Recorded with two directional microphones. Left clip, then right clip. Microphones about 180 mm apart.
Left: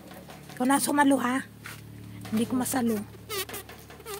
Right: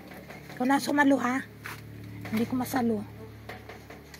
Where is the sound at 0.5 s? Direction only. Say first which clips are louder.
Left 1 dB; 35° left (ahead or behind).